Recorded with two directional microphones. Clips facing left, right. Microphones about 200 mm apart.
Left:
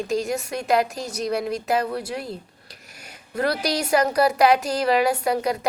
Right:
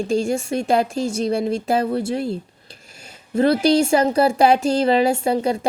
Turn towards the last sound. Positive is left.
turn(degrees=-25)  # may be behind; listen again after turning